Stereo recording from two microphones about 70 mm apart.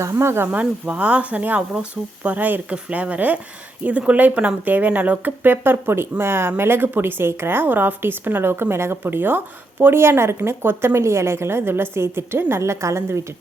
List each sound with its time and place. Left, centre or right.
0.1 s a woman's voice: right
0.5 s a woman's voice: centre; by 13.2 s right